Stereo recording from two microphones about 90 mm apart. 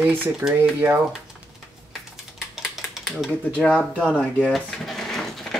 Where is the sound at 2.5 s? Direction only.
5° right (ahead or behind).